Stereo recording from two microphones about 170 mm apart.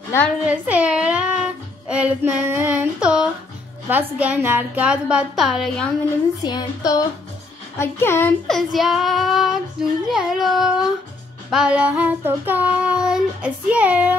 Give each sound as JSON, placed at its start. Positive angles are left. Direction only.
{"t": 0.4, "sound": "child singing", "side_deg": -5}
{"t": 3.9, "sound": "a woman's voice", "side_deg": -10}
{"t": 6.4, "sound": "a child's voice", "side_deg": 20}
{"t": 8.5, "sound": "child singing", "side_deg": 0}